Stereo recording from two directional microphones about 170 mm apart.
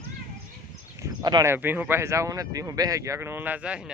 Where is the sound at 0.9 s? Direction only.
20° right (ahead or behind).